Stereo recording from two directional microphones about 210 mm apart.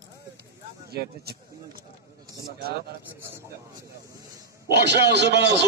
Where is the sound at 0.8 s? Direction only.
50° right (ahead or behind).